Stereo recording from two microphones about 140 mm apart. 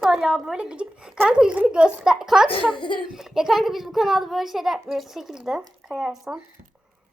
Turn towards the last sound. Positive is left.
turn(degrees=-5)  # may be behind; listen again after turning